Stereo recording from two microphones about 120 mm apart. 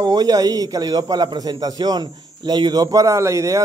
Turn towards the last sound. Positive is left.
turn(degrees=-25)  # may be behind; listen again after turning